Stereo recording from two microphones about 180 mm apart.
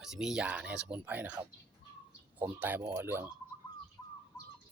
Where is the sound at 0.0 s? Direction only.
5° right (ahead or behind).